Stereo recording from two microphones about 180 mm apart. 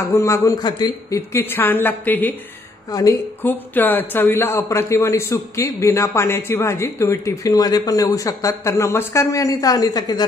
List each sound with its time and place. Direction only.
0.1 s speech: 15° left (ahead or behind)